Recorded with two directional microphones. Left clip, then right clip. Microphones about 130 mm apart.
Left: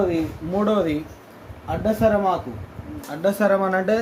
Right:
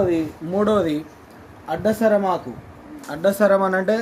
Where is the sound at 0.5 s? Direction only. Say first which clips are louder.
Right 2 dB; 20° right (ahead or behind).